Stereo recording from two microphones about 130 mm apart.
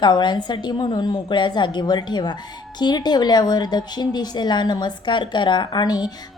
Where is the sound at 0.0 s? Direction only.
35° left (ahead or behind).